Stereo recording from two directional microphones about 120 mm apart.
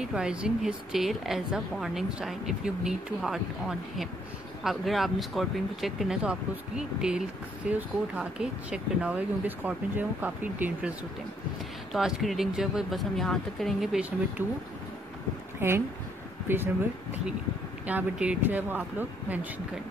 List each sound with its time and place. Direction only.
0.0 s a woman's voice: 5° right (ahead or behind)
11.9 s a woman's voice: centre (ahead or behind)
15.6 s speech: 20° right (ahead or behind)